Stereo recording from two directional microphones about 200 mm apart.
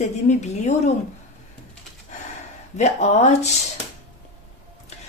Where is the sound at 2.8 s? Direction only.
35° left (ahead or behind).